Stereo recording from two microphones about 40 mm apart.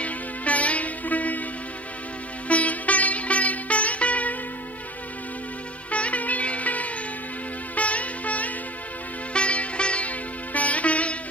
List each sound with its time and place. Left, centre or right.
0.0 s music: left
2.4 s music: left
5.9 s music: left